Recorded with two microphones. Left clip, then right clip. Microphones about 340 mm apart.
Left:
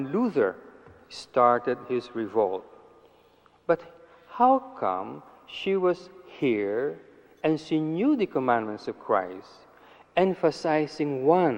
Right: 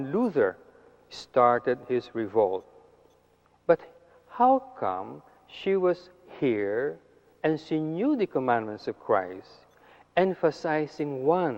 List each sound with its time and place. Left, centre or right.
0.0 s a man's voice: right
3.7 s a man's voice: right